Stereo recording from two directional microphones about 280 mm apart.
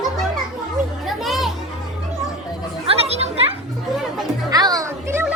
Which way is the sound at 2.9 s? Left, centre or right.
Right.